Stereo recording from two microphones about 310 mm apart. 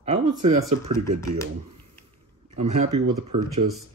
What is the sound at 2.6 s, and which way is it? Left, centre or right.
Speech, right.